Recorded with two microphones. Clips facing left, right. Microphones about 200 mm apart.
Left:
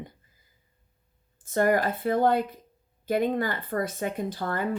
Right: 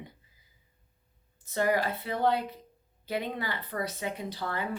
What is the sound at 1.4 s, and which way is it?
Speech, 50° left (ahead or behind).